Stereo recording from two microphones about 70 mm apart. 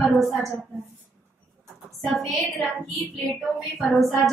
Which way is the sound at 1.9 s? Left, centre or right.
Centre.